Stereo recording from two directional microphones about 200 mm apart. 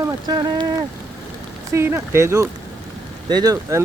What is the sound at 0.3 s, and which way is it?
Speech, 20° right (ahead or behind).